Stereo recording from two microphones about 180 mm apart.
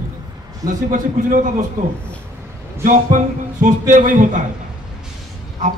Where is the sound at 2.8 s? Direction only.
45° right (ahead or behind).